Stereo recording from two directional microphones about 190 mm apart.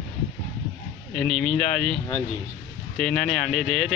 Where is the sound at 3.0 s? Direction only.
5° left (ahead or behind).